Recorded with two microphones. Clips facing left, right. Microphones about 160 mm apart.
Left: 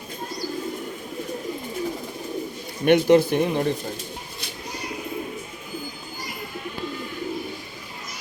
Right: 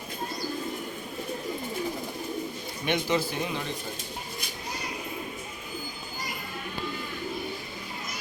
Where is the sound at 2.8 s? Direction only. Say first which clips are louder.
Left 11 dB; 60° left (ahead or behind).